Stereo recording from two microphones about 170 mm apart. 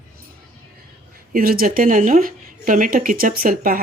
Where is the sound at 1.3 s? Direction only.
60° right (ahead or behind).